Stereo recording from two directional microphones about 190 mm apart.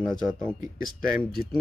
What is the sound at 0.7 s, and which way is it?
Speech, 50° left (ahead or behind).